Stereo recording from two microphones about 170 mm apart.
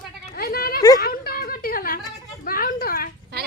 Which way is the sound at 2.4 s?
55° left (ahead or behind).